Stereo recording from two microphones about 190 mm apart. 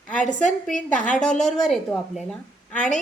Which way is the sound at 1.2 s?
5° left (ahead or behind).